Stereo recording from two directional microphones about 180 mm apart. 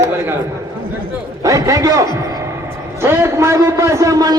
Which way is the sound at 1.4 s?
20° right (ahead or behind).